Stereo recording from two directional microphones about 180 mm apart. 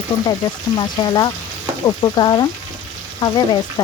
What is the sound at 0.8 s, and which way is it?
Speech, 25° left (ahead or behind).